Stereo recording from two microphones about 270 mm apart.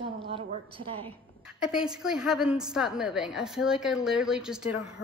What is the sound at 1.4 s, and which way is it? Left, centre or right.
A woman's voice, centre.